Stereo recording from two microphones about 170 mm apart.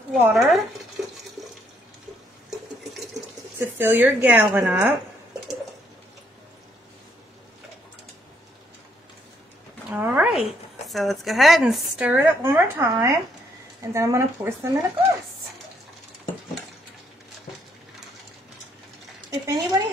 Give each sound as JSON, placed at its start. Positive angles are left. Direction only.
{"t": 0.1, "sound": "speech", "side_deg": 0}
{"t": 3.5, "sound": "speech", "side_deg": -10}
{"t": 9.8, "sound": "a sound", "side_deg": -10}
{"t": 10.4, "sound": "speech", "side_deg": 0}
{"t": 19.3, "sound": "speech", "side_deg": -25}